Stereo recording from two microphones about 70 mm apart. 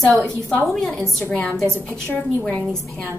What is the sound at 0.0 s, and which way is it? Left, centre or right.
A woman's voice, centre.